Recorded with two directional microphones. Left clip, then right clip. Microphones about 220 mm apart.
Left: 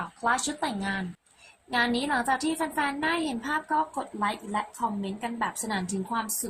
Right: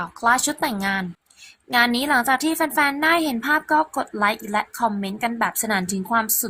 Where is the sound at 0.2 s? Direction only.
35° right (ahead or behind).